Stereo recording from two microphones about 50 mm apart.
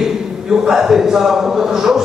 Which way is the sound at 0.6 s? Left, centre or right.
Centre.